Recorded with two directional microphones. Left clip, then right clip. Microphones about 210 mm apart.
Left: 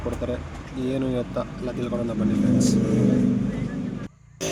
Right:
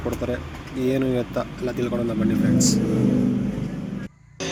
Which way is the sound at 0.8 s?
5° right (ahead or behind).